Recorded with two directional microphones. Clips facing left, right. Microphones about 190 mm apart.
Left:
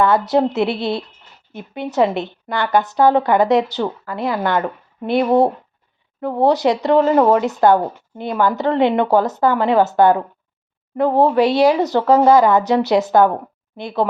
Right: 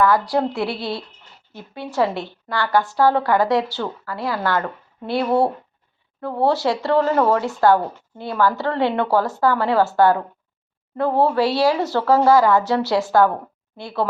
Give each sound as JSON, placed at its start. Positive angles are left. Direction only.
{"t": 0.0, "sound": "speech", "side_deg": 25}